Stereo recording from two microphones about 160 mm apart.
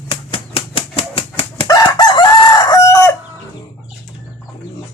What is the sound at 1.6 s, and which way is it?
Chicken, 25° left (ahead or behind).